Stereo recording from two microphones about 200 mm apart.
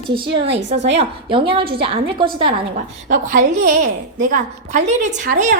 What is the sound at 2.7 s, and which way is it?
A woman's voice, 40° right (ahead or behind).